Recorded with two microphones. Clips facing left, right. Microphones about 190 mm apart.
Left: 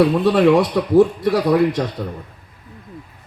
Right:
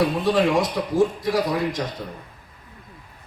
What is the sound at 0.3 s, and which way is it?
A man's voice, 65° left (ahead or behind).